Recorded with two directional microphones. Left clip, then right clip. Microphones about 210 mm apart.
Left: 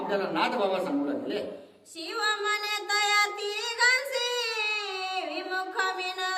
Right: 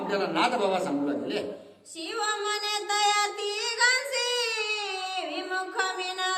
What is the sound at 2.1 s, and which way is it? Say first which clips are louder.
Child singing: left 1 dB; 15° left (ahead or behind).